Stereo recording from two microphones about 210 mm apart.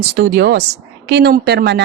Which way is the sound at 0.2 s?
50° right (ahead or behind).